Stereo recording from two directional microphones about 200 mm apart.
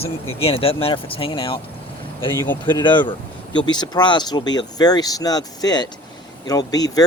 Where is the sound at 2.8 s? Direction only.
25° left (ahead or behind).